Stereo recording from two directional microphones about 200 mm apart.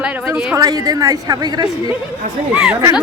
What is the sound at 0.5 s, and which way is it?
Speech, 20° right (ahead or behind).